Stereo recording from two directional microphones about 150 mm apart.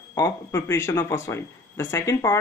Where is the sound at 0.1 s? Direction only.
20° left (ahead or behind).